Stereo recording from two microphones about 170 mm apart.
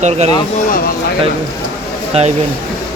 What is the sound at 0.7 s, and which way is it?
Speech, 60° left (ahead or behind).